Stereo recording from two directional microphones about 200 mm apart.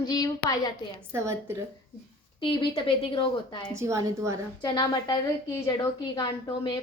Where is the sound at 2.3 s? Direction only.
25° left (ahead or behind).